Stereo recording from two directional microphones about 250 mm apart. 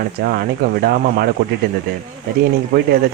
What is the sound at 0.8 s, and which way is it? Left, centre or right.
Speech, right.